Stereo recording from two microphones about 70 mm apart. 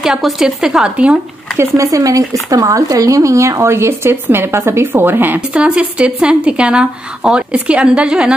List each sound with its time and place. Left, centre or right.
0.0 s a woman's voice: centre
1.6 s speech: right
5.5 s speech: centre